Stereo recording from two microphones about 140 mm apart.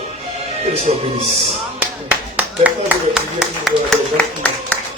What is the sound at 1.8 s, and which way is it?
Speech, 10° right (ahead or behind).